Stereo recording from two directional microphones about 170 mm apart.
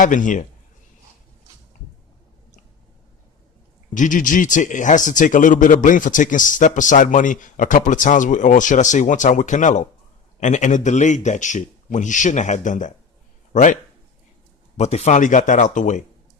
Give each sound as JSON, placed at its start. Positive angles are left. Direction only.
{"t": 0.0, "sound": "speech", "side_deg": 50}
{"t": 3.9, "sound": "speech", "side_deg": 50}
{"t": 14.8, "sound": "speech", "side_deg": 40}